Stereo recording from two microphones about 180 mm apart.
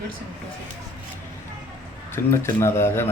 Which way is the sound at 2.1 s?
15° left (ahead or behind).